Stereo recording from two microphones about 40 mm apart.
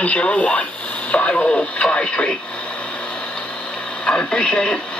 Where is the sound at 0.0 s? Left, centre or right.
Left.